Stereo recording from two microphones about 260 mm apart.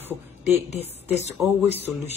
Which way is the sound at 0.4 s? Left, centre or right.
Left.